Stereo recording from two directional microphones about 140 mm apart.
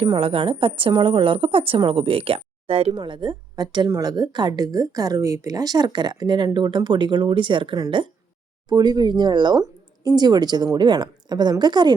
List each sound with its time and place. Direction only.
0.0 s speech: 40° right (ahead or behind)